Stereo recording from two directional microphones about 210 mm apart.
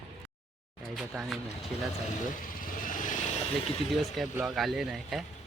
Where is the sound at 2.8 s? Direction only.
40° left (ahead or behind).